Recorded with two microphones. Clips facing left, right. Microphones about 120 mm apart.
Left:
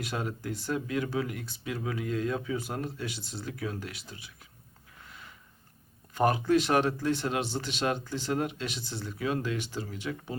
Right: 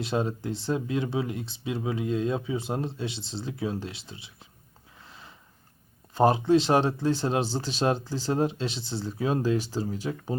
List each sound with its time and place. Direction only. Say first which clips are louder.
0.0 s speech: right 6 dB; 25° right (ahead or behind)
5.0 s a sound: right 1 dB; 30° right (ahead or behind)
6.1 s speech: right 4 dB; 25° right (ahead or behind)